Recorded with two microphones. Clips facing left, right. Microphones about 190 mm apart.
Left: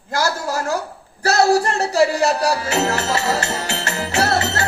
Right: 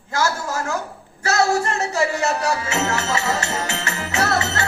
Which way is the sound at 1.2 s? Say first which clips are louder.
Left 4 dB; 35° left (ahead or behind).